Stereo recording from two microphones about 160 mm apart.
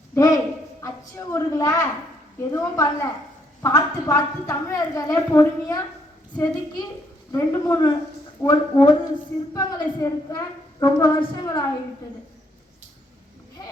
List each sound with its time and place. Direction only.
0.1 s a woman's voice: 20° left (ahead or behind)
7.3 s a woman's voice: 20° left (ahead or behind)